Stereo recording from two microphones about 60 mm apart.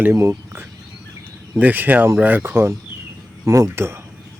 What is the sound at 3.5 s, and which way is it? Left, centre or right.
Speech, right.